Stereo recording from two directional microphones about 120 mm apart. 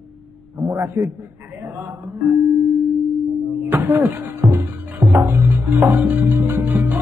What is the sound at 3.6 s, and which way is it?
Music, 15° right (ahead or behind).